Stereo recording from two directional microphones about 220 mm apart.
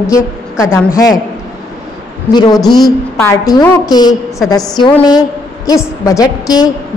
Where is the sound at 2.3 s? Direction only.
20° left (ahead or behind).